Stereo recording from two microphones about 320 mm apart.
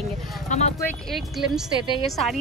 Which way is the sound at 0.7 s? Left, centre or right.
Centre.